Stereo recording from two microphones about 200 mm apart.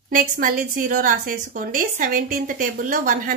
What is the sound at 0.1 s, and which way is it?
A woman's voice, 45° right (ahead or behind).